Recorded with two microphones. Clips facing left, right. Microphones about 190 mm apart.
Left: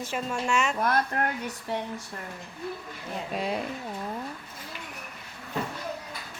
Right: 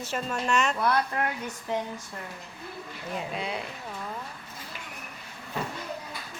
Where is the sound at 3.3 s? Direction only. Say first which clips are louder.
Left 7 dB; 45° left (ahead or behind).